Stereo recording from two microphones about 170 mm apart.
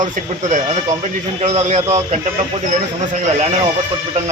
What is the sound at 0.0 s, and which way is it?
Speech, 45° right (ahead or behind).